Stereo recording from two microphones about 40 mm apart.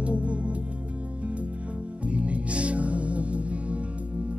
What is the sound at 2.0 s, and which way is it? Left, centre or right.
Music, right.